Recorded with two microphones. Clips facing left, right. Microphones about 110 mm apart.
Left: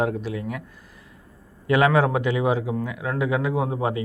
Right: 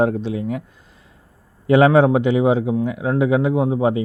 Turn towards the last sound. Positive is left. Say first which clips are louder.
# right 6 dB
turn(degrees=-20)  # may be behind; listen again after turning